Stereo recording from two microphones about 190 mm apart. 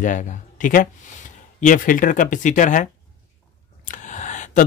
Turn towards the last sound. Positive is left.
turn(degrees=40)  # may be behind; listen again after turning